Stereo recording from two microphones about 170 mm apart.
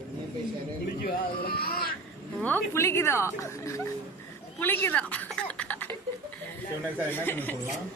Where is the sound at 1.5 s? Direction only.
65° left (ahead or behind).